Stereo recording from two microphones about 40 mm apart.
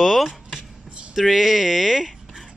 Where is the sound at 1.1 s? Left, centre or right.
Centre.